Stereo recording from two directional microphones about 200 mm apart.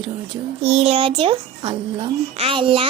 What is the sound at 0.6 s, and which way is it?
A child's voice, 30° right (ahead or behind).